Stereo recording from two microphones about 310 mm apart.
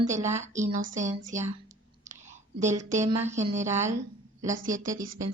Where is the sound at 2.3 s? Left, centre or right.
Right.